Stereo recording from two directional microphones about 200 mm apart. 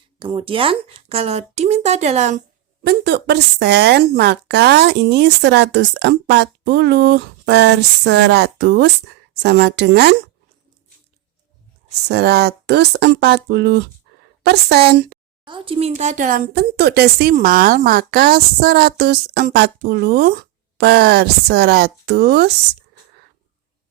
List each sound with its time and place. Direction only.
0.2 s speech: 25° right (ahead or behind)
2.8 s a woman's voice: 55° right (ahead or behind)
12.0 s a woman's voice: 55° right (ahead or behind)
15.4 s speech: 25° right (ahead or behind); by 22.5 s 55° right (ahead or behind)